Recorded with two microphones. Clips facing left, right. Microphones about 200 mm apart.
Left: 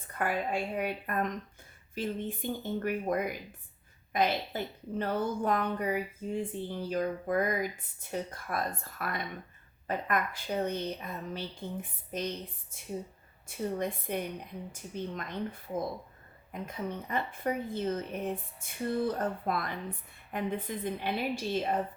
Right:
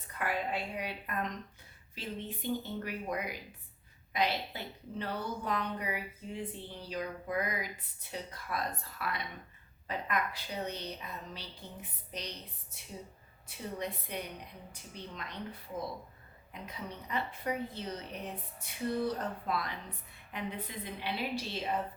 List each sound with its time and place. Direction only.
0.1 s a woman's voice: 45° left (ahead or behind)
16.5 s a woman's voice: 50° left (ahead or behind)